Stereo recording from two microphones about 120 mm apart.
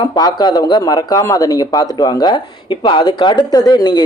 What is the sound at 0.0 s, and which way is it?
Speech, 35° left (ahead or behind).